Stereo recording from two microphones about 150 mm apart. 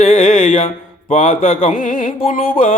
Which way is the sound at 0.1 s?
60° left (ahead or behind).